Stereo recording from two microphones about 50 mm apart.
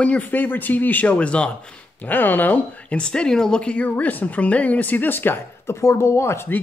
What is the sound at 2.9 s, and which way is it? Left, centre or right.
Speech, centre.